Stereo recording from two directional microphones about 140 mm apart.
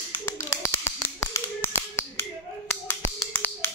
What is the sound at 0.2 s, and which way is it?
Finger snapping, 20° left (ahead or behind).